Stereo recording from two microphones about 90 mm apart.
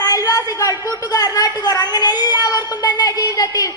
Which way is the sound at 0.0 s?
40° left (ahead or behind).